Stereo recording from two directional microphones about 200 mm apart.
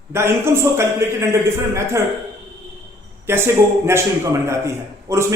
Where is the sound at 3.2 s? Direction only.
10° right (ahead or behind).